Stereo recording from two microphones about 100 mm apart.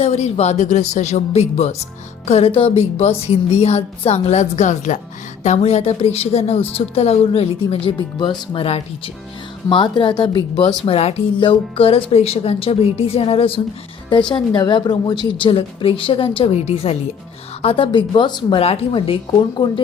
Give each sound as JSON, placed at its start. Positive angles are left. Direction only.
{"t": 0.0, "sound": "a woman's voice", "side_deg": 90}
{"t": 5.4, "sound": "a woman's voice", "side_deg": 90}
{"t": 7.9, "sound": "speech", "side_deg": 50}
{"t": 9.6, "sound": "speech", "side_deg": 50}
{"t": 10.8, "sound": "speech", "side_deg": 80}
{"t": 11.4, "sound": "a woman's voice", "side_deg": 65}
{"t": 14.1, "sound": "a woman's voice", "side_deg": 50}
{"t": 17.6, "sound": "a woman's voice", "side_deg": 65}
{"t": 18.6, "sound": "a woman's voice", "side_deg": 85}